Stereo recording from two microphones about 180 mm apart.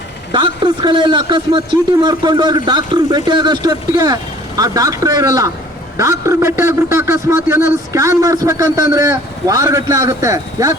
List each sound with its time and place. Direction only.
0.3 s a man's voice: 25° right (ahead or behind)